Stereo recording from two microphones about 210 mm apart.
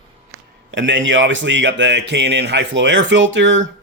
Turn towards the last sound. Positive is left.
turn(degrees=-65)  # may be behind; listen again after turning